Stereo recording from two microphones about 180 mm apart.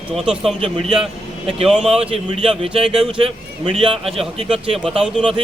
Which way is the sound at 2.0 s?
35° right (ahead or behind).